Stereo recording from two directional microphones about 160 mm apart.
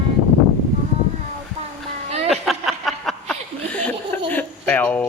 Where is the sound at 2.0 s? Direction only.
40° right (ahead or behind).